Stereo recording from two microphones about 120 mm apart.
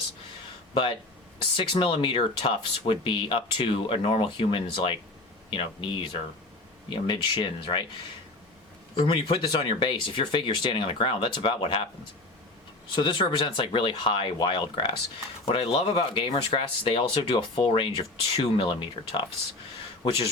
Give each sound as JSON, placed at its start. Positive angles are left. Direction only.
{"t": 0.7, "sound": "speech", "side_deg": 45}
{"t": 9.0, "sound": "speech", "side_deg": 45}
{"t": 12.9, "sound": "speech", "side_deg": 40}